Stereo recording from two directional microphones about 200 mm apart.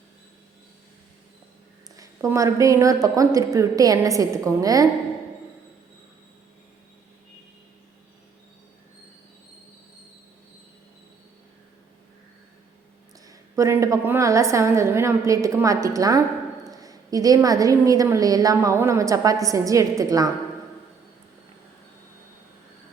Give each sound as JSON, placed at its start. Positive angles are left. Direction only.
{"t": 2.0, "sound": "a woman's voice", "side_deg": -15}
{"t": 13.2, "sound": "a woman's voice", "side_deg": -15}